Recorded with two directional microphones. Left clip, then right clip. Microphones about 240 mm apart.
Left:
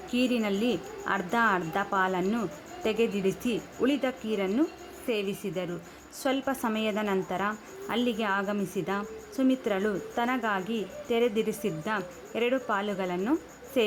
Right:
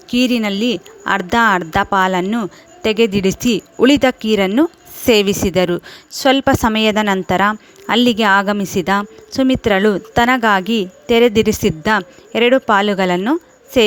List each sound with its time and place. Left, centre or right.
0.1 s a woman's voice: right